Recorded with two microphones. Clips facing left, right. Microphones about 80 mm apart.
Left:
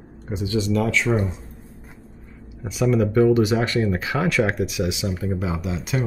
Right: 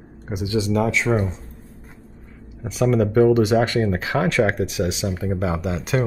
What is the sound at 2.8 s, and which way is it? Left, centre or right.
Speech, right.